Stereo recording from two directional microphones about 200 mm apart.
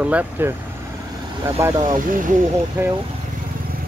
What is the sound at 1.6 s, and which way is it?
Speech, 20° right (ahead or behind).